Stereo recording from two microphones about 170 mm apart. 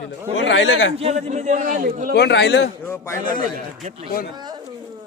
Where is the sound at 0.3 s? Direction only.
90° left.